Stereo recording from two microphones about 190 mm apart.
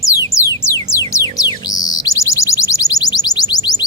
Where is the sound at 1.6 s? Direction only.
20° left (ahead or behind).